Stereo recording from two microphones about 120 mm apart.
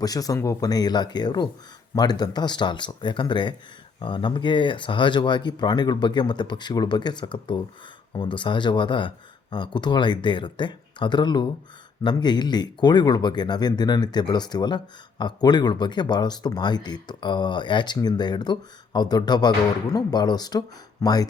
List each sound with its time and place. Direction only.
0.0 s speech: 30° left (ahead or behind)